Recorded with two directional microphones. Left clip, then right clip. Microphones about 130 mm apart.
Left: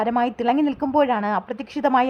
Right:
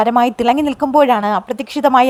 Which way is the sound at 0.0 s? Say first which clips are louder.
Right 8 dB; 35° right (ahead or behind).